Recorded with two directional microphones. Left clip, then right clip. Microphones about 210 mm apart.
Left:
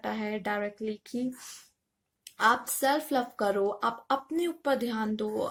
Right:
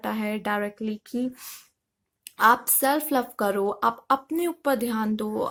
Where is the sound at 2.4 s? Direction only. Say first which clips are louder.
Right 5 dB; 30° right (ahead or behind).